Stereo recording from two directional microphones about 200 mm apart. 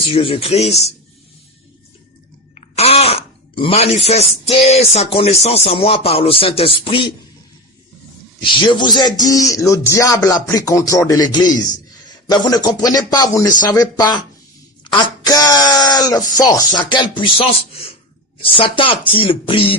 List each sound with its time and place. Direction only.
0.1 s speech: 30° left (ahead or behind)
2.6 s speech: 30° left (ahead or behind)
8.4 s a man's voice: 25° left (ahead or behind)
18.5 s speech: 25° left (ahead or behind)